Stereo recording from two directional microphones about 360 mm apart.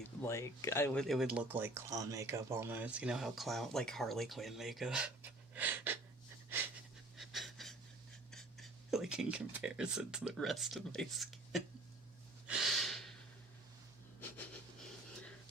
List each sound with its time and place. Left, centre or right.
0.3 s speech: centre
7.2 s pant: centre
8.3 s speech: centre
12.5 s gasp: centre